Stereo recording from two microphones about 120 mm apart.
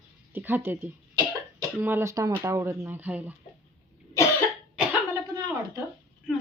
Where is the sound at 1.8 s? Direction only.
20° right (ahead or behind).